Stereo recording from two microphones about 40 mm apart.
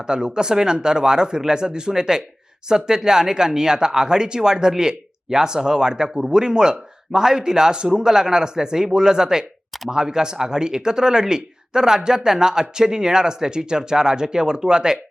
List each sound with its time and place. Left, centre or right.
0.0 s speech: centre